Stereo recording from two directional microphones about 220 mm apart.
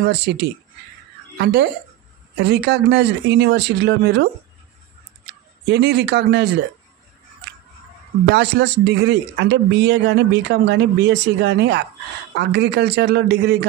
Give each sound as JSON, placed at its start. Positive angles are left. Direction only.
{"t": 0.0, "sound": "a man's voice", "side_deg": -50}
{"t": 5.7, "sound": "a man's voice", "side_deg": -50}
{"t": 8.3, "sound": "a man's voice", "side_deg": -50}